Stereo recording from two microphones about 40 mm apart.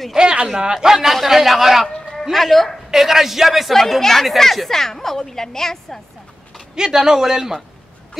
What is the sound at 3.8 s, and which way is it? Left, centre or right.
A woman's voice, centre.